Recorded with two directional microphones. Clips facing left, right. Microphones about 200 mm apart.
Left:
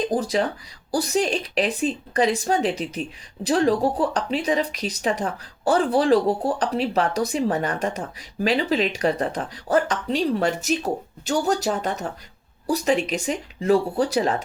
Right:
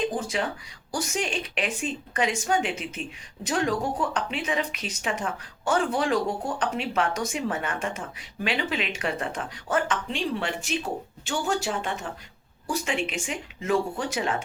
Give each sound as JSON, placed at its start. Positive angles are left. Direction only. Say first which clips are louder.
{"t": 0.0, "sound": "speech", "louder": "left 5 dB", "side_deg": 35}